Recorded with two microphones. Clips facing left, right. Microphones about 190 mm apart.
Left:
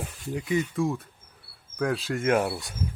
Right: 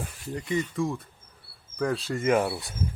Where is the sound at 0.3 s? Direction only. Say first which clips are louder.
Left 2 dB; 5° left (ahead or behind).